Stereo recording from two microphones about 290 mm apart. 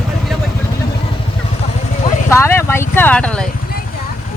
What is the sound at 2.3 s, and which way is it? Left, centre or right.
Speech, centre.